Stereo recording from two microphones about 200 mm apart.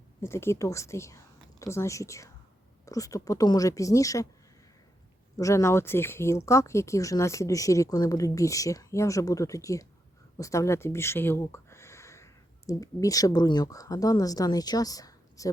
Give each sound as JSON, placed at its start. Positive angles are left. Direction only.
{"t": 0.2, "sound": "a woman's voice", "side_deg": 10}
{"t": 5.4, "sound": "speech", "side_deg": 15}